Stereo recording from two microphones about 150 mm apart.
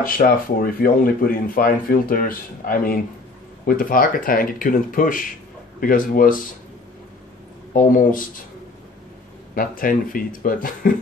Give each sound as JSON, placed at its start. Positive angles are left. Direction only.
{"t": 0.0, "sound": "speech", "side_deg": 75}
{"t": 7.7, "sound": "speech", "side_deg": 65}
{"t": 9.6, "sound": "speech", "side_deg": 70}